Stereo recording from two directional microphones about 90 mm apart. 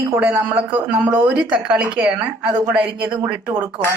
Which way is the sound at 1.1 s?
20° right (ahead or behind).